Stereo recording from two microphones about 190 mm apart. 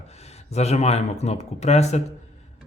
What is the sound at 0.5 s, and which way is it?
Speech, 35° left (ahead or behind).